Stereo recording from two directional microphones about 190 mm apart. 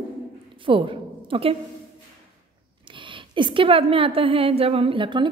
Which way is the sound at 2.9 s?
25° right (ahead or behind).